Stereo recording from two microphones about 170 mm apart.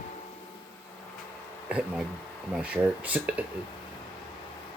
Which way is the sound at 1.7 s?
5° right (ahead or behind).